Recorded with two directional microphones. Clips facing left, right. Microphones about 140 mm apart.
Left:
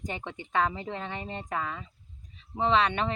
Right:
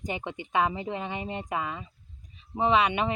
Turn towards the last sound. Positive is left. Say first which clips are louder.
# right 1 dB
turn(degrees=-10)  # may be behind; listen again after turning